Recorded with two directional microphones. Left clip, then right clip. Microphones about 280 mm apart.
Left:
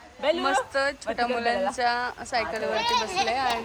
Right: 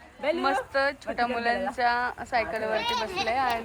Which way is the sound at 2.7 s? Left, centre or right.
Left.